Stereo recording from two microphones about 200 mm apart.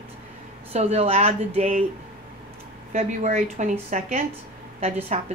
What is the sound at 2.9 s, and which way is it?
Speech, 35° right (ahead or behind).